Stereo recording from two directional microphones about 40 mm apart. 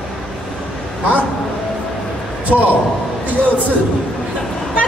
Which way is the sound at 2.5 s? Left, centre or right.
Right.